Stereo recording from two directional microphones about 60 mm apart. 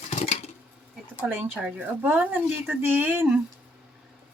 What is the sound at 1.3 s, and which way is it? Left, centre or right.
Speech, right.